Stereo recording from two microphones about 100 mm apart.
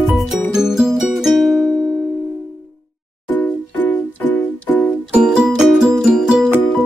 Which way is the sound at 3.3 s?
20° left (ahead or behind).